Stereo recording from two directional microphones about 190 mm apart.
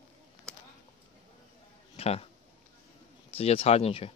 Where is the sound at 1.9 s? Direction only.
30° left (ahead or behind).